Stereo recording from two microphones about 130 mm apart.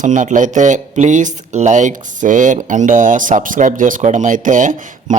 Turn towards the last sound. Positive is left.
turn(degrees=-85)